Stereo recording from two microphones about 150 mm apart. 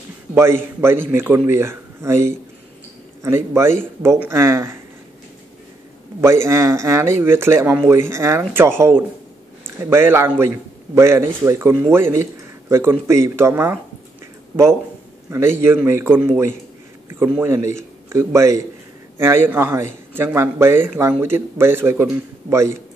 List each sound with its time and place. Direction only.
0.3 s a man's voice: 15° right (ahead or behind)
6.2 s a man's voice: 15° right (ahead or behind)
15.2 s a man's voice: 15° right (ahead or behind)